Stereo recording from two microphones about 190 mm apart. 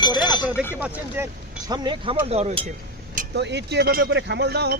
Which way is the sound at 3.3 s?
65° right (ahead or behind).